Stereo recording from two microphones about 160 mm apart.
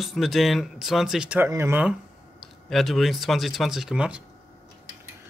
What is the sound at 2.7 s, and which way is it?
Music, centre (ahead or behind).